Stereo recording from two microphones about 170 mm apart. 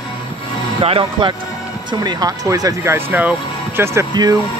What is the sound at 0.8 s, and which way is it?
Speech, 35° right (ahead or behind).